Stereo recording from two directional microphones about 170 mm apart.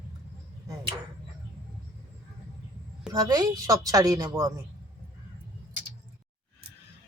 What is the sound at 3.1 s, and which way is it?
A woman's voice, 25° right (ahead or behind).